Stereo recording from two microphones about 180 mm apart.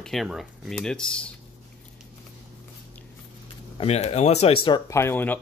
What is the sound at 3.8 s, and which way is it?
Speech, 35° left (ahead or behind).